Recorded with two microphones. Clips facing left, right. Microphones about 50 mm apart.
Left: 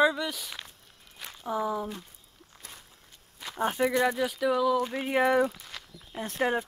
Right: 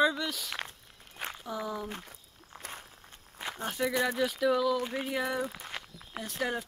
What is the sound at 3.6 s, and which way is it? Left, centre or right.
Speech, left.